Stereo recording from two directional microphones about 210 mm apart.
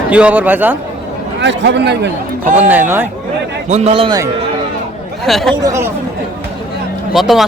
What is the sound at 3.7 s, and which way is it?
Speech, 35° right (ahead or behind).